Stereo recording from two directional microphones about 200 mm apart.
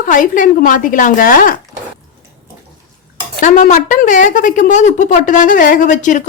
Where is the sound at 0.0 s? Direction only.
40° left (ahead or behind).